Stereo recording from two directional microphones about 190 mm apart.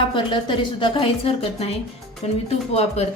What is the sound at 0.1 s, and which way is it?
A woman's voice, 25° left (ahead or behind).